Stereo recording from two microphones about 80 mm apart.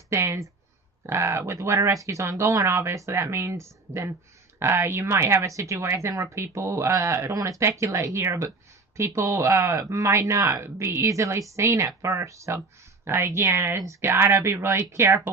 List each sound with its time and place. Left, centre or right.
0.1 s speech: right